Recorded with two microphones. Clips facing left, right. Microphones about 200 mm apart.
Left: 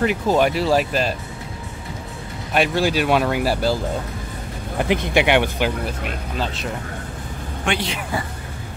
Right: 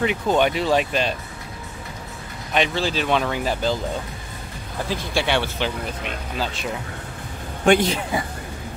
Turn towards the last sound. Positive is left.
turn(degrees=-40)  # may be behind; listen again after turning